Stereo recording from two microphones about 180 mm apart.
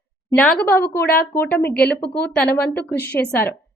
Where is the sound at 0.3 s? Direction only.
10° left (ahead or behind).